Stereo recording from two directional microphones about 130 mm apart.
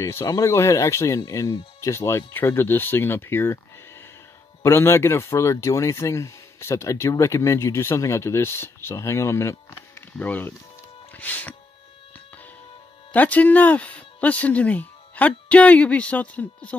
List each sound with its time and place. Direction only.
0.0 s speech: 25° left (ahead or behind)
11.1 s music: 15° left (ahead or behind)
13.1 s speech: 10° left (ahead or behind)